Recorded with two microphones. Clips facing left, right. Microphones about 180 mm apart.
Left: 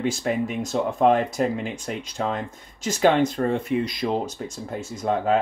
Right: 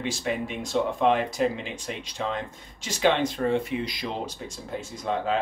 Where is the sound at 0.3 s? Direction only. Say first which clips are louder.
Left 5 dB; 45° left (ahead or behind).